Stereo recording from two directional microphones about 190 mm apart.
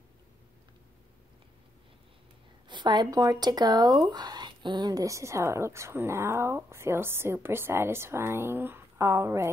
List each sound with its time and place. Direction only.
2.7 s a woman's voice: 25° right (ahead or behind)